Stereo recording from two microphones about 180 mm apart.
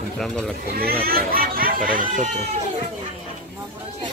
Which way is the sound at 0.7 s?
55° right (ahead or behind).